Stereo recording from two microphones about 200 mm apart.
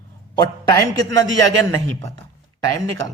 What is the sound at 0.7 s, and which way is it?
Speech, 15° left (ahead or behind).